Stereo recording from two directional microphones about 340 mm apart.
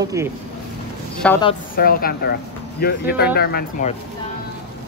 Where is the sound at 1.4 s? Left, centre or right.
Left.